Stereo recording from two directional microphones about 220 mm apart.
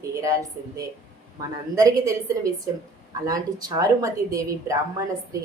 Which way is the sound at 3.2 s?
15° right (ahead or behind).